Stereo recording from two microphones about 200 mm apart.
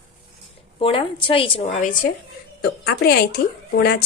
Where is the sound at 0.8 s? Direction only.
25° left (ahead or behind).